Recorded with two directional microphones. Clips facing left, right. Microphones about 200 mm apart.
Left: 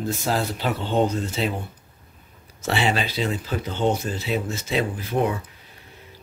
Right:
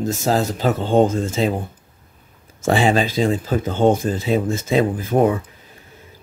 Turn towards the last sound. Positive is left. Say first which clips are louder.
# right 7 dB
turn(degrees=-50)  # may be behind; listen again after turning